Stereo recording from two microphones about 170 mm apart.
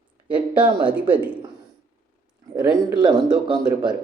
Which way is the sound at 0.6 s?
25° right (ahead or behind).